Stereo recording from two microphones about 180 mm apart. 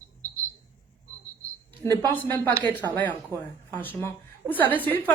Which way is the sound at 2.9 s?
10° left (ahead or behind).